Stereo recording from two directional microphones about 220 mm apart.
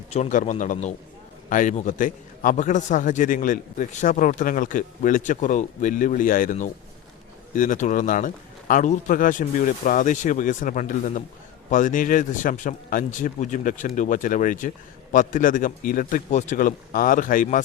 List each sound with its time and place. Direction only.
0.1 s a man's voice: 35° left (ahead or behind)